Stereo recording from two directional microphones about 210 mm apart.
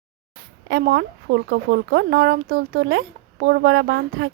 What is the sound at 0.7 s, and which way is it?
A woman's voice, 55° right (ahead or behind).